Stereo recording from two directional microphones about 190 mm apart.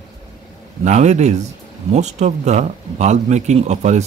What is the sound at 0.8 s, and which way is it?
Speech, 35° right (ahead or behind).